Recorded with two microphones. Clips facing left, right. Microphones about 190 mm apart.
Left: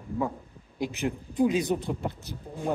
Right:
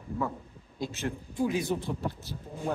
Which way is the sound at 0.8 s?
15° left (ahead or behind).